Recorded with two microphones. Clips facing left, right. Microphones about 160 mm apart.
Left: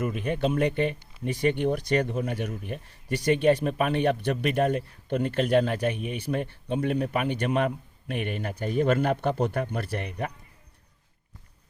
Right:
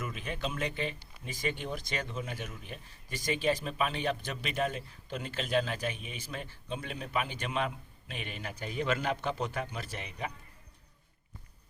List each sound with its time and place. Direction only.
0.0 s speech: 55° left (ahead or behind)